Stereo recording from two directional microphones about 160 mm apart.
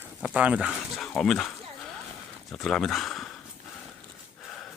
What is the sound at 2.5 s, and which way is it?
Speech, centre (ahead or behind).